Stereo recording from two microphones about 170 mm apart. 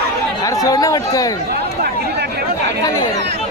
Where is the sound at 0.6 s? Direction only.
20° left (ahead or behind).